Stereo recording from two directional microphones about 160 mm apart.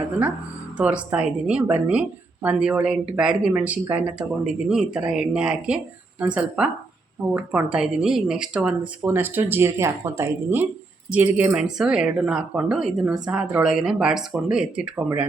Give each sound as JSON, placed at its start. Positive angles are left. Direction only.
{"t": 0.8, "sound": "a woman's voice", "side_deg": -10}